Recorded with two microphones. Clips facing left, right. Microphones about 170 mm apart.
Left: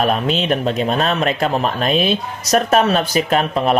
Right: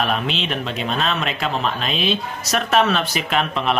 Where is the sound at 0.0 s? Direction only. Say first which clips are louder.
Left 5 dB; 45° left (ahead or behind).